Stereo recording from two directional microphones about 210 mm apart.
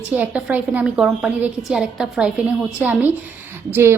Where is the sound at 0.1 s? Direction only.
5° right (ahead or behind).